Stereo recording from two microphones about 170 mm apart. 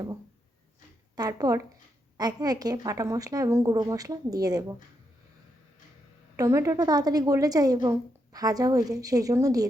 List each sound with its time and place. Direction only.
1.1 s a woman's voice: 20° right (ahead or behind)
6.3 s a woman's voice: 20° right (ahead or behind)